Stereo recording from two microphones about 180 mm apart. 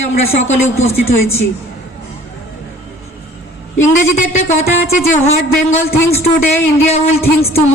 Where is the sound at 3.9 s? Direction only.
40° left (ahead or behind).